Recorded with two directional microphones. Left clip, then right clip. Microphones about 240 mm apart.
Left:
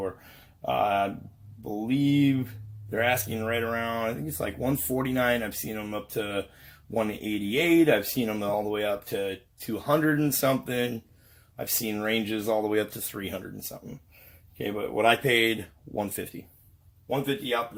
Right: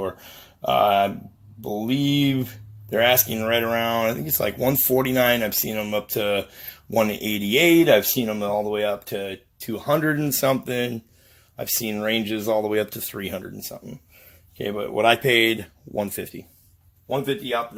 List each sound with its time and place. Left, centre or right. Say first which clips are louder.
0.6 s speech: right 7 dB; right